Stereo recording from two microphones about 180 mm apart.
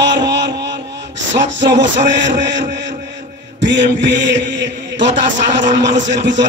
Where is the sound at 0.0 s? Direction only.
75° right (ahead or behind).